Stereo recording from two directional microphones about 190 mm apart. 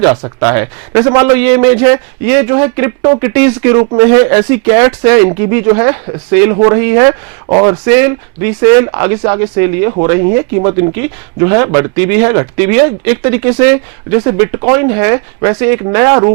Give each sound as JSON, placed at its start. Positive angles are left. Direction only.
{"t": 0.3, "sound": "speech", "side_deg": -15}